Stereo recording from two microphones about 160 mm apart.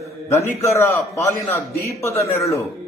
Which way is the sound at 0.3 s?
15° left (ahead or behind).